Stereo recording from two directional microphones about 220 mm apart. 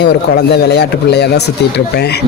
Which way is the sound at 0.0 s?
50° left (ahead or behind).